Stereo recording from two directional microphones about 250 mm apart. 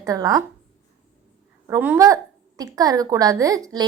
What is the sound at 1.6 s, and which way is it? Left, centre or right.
A woman's voice, centre.